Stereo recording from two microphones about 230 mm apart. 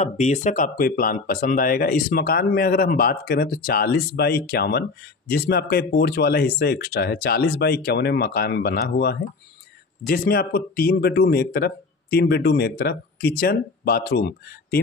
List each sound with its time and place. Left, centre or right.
0.0 s speech: left